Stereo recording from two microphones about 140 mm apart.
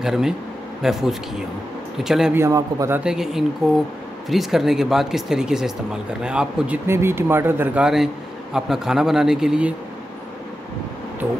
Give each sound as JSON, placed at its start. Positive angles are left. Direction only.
{"t": 0.0, "sound": "speech", "side_deg": -5}
{"t": 2.0, "sound": "speech", "side_deg": -5}
{"t": 2.3, "sound": "a man's voice", "side_deg": -20}
{"t": 3.0, "sound": "speech", "side_deg": -5}
{"t": 6.9, "sound": "speech", "side_deg": -15}